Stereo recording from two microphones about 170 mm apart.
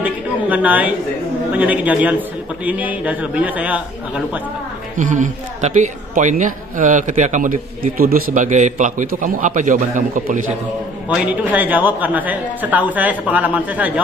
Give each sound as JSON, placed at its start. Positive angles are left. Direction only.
{"t": 0.0, "sound": "a sound", "side_deg": -10}
{"t": 1.5, "sound": "a woman's voice", "side_deg": -10}
{"t": 4.9, "sound": "a man's voice", "side_deg": -50}
{"t": 11.1, "sound": "a woman's voice", "side_deg": -10}